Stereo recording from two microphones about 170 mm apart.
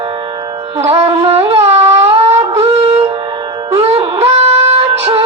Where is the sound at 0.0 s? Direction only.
30° right (ahead or behind).